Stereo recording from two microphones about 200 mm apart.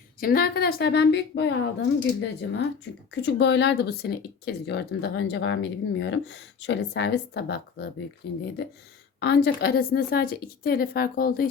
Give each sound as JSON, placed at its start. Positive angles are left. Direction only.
{"t": 0.2, "sound": "a woman's voice", "side_deg": 45}